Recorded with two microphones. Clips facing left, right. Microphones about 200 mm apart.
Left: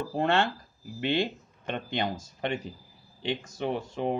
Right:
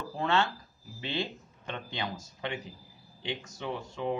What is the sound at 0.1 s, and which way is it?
Speech, 55° left (ahead or behind).